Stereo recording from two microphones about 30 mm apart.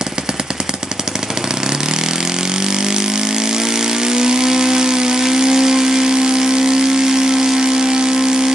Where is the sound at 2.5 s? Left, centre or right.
Right.